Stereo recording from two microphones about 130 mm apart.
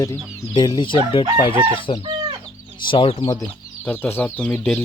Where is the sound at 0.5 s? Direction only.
35° left (ahead or behind).